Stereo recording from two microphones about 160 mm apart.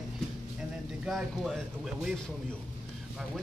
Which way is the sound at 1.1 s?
Centre (ahead or behind).